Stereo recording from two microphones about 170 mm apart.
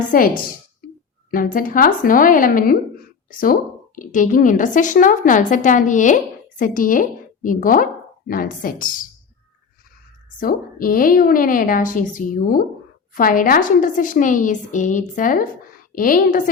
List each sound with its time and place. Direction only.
1.3 s a woman's voice: 55° left (ahead or behind)
10.3 s a woman's voice: 55° left (ahead or behind)